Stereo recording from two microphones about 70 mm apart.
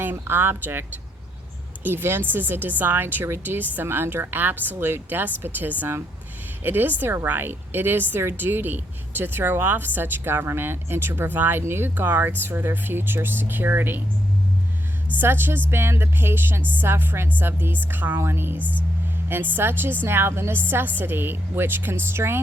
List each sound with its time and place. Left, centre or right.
0.0 s speech: right
15.2 s speech: right
18.6 s speech: left
19.3 s speech: right